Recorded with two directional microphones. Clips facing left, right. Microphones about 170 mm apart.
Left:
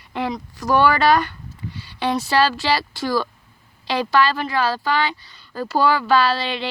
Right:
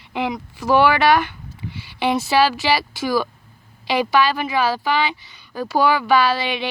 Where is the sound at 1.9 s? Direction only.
5° right (ahead or behind).